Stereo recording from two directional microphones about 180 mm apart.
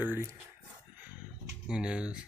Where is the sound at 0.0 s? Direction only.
10° right (ahead or behind).